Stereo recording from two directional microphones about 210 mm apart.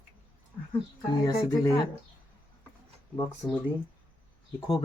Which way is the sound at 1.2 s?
20° left (ahead or behind).